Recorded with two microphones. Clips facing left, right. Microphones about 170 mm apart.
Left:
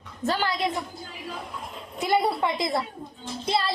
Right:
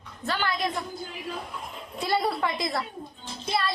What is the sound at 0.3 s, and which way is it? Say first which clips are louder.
Speech: left 3 dB; 35° left (ahead or behind).